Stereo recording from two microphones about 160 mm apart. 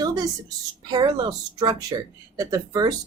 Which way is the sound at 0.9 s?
25° right (ahead or behind).